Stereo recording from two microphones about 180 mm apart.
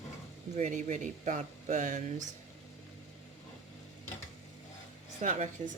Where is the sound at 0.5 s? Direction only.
40° right (ahead or behind).